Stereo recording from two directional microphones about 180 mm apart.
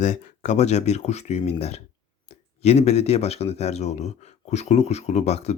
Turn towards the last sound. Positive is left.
turn(degrees=35)  # may be behind; listen again after turning